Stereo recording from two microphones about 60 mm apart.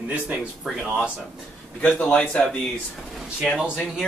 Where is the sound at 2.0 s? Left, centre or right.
Left.